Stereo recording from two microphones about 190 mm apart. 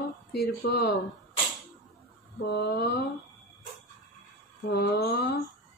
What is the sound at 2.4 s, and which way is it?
Speech, 60° left (ahead or behind).